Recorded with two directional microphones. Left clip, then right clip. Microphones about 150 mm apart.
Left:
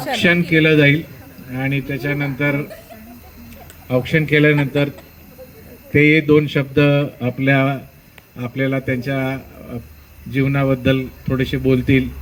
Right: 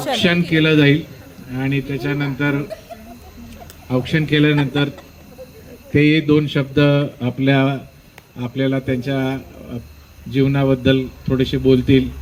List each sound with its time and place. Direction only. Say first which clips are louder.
0.2 s speech: left 4 dB; 35° left (ahead or behind)
3.8 s speech: left 2 dB; 35° left (ahead or behind)
5.9 s speech: left 2 dB; 30° left (ahead or behind)